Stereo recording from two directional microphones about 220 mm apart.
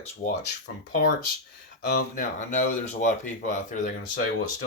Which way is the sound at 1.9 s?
35° left (ahead or behind).